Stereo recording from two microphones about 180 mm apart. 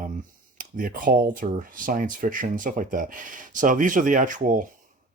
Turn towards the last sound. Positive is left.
turn(degrees=-45)  # may be behind; listen again after turning